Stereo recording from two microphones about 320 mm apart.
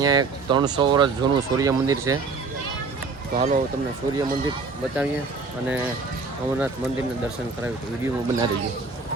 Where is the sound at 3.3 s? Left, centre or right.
Right.